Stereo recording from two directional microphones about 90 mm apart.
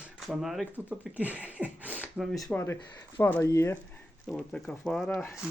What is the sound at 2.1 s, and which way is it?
Speech, centre (ahead or behind).